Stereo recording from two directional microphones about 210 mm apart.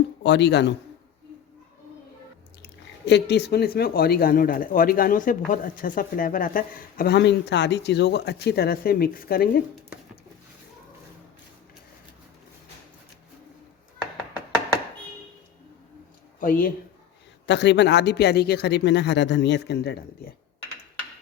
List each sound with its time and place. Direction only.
0.2 s speech: 55° left (ahead or behind)
3.1 s speech: 55° left (ahead or behind)
16.4 s speech: 40° left (ahead or behind)
17.4 s speech: 55° left (ahead or behind)